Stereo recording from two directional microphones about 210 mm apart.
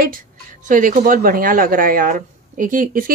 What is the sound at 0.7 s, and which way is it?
Speech, 40° right (ahead or behind).